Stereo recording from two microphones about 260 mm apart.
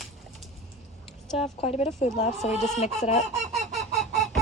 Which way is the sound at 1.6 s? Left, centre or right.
Left.